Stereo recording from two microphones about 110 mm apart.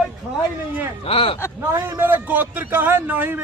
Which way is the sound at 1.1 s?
60° left (ahead or behind).